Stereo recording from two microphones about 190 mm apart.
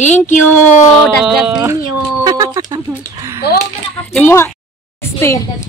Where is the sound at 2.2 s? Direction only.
20° right (ahead or behind).